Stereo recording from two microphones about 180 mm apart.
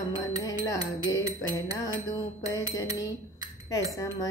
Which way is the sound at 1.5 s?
20° left (ahead or behind).